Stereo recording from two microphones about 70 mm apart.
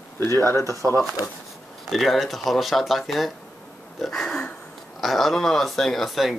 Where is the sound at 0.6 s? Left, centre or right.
Right.